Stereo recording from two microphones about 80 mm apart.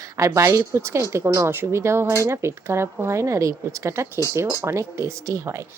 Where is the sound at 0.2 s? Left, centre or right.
Right.